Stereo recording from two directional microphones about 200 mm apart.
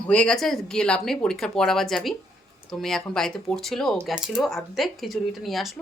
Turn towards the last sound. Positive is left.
turn(degrees=0)  # may be behind; listen again after turning